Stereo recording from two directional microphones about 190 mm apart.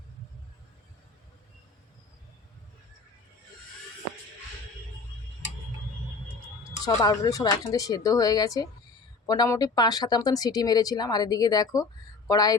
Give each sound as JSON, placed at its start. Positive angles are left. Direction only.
{"t": 6.8, "sound": "speech", "side_deg": 20}